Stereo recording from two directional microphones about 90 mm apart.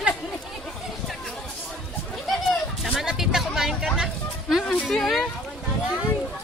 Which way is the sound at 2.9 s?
5° right (ahead or behind).